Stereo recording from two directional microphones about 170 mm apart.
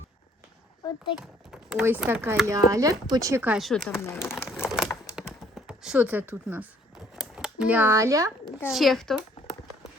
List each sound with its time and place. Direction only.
1.7 s speech: 10° right (ahead or behind)
2.5 s speech: 20° right (ahead or behind)
3.6 s speech: centre (ahead or behind)
3.9 s speech: 15° left (ahead or behind)
4.6 s typing: 5° right (ahead or behind)
7.2 s speech: 5° right (ahead or behind)
8.6 s speech: centre (ahead or behind)